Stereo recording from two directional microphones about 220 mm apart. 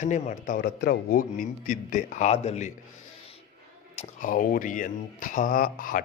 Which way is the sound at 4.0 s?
35° left (ahead or behind).